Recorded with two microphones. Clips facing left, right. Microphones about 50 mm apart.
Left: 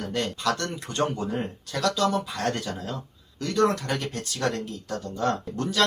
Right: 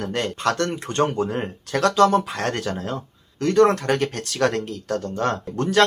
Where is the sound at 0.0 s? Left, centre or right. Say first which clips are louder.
Right 4 dB; right.